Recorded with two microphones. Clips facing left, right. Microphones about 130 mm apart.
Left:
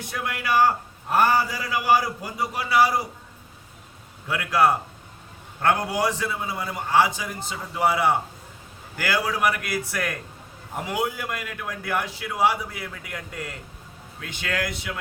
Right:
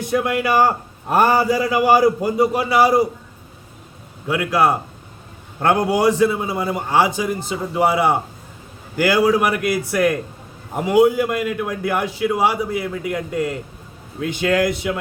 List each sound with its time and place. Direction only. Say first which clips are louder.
0.0 s a man's voice: right 11 dB; 20° right (ahead or behind)
4.3 s a man's voice: right 4 dB; 10° right (ahead or behind)